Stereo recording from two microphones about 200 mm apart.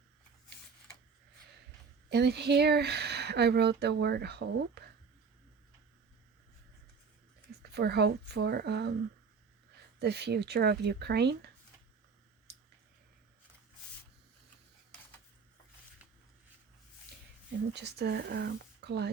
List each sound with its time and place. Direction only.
2.0 s speech: 55° right (ahead or behind)
7.6 s speech: 55° right (ahead or behind)
10.0 s speech: 55° right (ahead or behind)
17.7 s speech: 55° right (ahead or behind)